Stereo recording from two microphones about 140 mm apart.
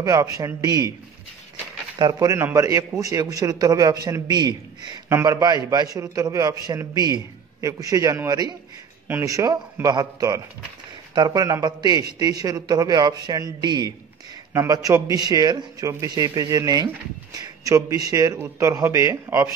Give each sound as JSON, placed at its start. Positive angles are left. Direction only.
{"t": 0.0, "sound": "a man's voice", "side_deg": -25}
{"t": 2.0, "sound": "a man's voice", "side_deg": -30}